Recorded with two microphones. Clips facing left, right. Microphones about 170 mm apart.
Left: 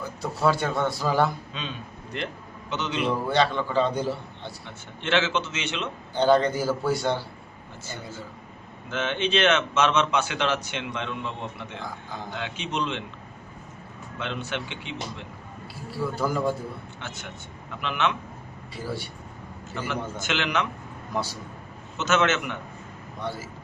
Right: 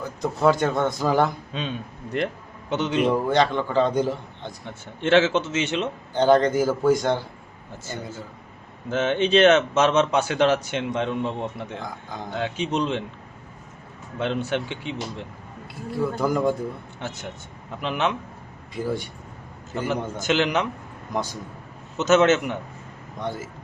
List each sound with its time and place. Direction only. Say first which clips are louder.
0.2 s speech: right 4 dB; 20° right (ahead or behind)
2.1 s a man's voice: right 7 dB; 55° right (ahead or behind)
3.1 s a man's voice: even; 15° right (ahead or behind)
4.6 s speech: right 9 dB; 45° right (ahead or behind)
6.1 s a man's voice: right 3 dB; 15° right (ahead or behind)
8.9 s speech: right 6 dB; 40° right (ahead or behind)
14.2 s speech: right 7 dB; 40° right (ahead or behind)
15.9 s speech: right 4 dB; 20° right (ahead or behind)
17.7 s speech: right 2 dB; 40° right (ahead or behind)
18.7 s a man's voice: right 6 dB; 15° right (ahead or behind)
20.2 s speech: right 6 dB; 40° right (ahead or behind)
21.1 s a man's voice: right 2 dB; 15° right (ahead or behind)
21.9 s speech: right 6 dB; 35° right (ahead or behind)